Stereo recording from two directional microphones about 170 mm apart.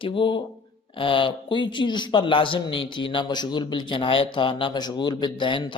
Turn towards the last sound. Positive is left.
turn(degrees=30)  # may be behind; listen again after turning